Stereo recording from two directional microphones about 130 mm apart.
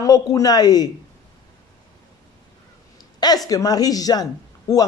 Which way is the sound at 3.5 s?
30° left (ahead or behind).